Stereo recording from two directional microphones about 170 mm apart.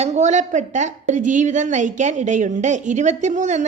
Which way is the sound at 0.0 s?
45° right (ahead or behind).